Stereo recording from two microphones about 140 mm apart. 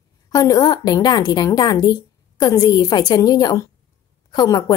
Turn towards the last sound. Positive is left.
turn(degrees=30)  # may be behind; listen again after turning